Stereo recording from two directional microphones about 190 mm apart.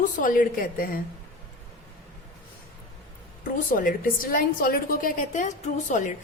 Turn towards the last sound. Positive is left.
turn(degrees=40)  # may be behind; listen again after turning